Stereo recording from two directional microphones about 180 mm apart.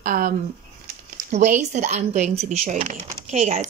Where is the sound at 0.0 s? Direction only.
50° right (ahead or behind).